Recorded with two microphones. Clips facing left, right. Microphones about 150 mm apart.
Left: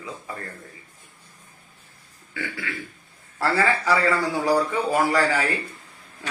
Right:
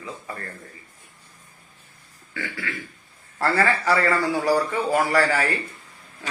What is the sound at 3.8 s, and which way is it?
A man's voice, 15° left (ahead or behind).